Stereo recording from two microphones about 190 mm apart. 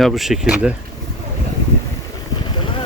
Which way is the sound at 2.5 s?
25° left (ahead or behind).